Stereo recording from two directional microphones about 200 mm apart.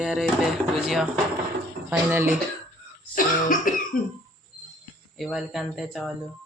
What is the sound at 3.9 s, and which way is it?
Cough, 45° left (ahead or behind).